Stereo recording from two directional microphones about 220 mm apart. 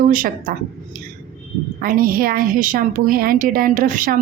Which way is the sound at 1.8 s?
40° right (ahead or behind).